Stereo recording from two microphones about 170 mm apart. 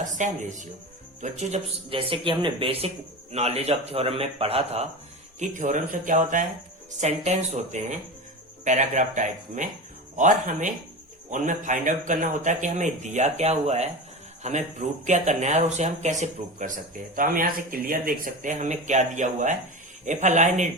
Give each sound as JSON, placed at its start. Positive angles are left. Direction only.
{"t": 0.2, "sound": "a man's voice", "side_deg": -45}
{"t": 5.4, "sound": "a man's voice", "side_deg": -45}